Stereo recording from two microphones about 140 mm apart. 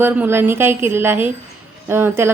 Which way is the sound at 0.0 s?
15° right (ahead or behind).